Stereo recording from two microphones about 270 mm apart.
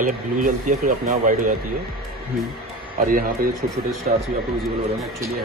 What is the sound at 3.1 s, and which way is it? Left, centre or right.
Speech, right.